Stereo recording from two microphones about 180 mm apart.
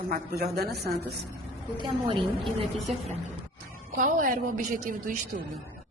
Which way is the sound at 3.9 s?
50° right (ahead or behind).